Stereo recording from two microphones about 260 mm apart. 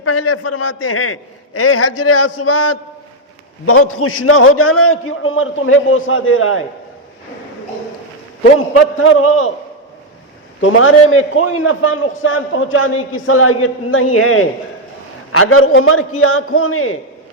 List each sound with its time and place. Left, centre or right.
0.0 s a man's voice: left
8.5 s a man's voice: left
10.6 s a man's voice: left